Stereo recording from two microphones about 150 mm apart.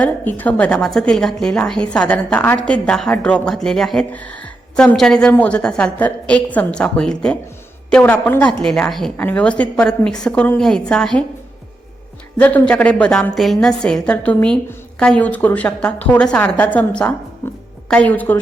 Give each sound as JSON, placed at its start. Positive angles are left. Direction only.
{"t": 0.0, "sound": "a woman's voice", "side_deg": 10}
{"t": 12.4, "sound": "a woman's voice", "side_deg": 10}